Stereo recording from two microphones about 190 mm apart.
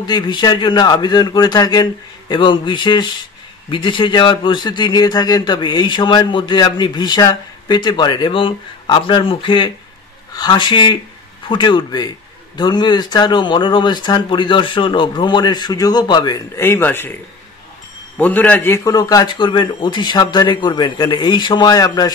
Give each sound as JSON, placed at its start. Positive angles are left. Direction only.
{"t": 0.0, "sound": "speech", "side_deg": 25}
{"t": 18.1, "sound": "speech", "side_deg": 10}